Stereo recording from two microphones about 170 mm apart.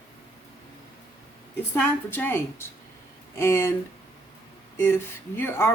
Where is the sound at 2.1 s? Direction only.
10° left (ahead or behind).